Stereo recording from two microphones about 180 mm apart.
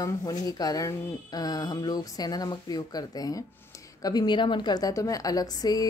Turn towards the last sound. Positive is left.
turn(degrees=20)  # may be behind; listen again after turning